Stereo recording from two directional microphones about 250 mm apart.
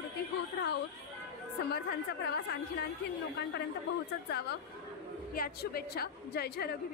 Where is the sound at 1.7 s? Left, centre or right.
Left.